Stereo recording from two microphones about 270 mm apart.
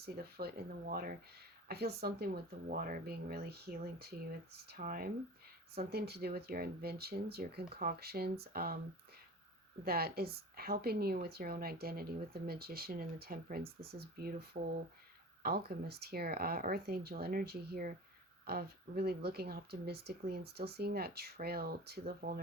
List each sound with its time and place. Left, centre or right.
0.0 s a woman's voice: right
9.8 s a woman's voice: right